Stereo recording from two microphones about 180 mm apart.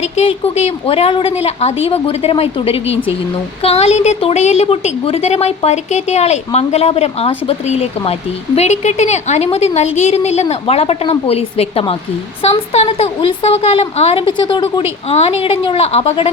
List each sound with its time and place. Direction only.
0.0 s a woman's voice: 35° left (ahead or behind)
15.1 s a woman's voice: 35° left (ahead or behind)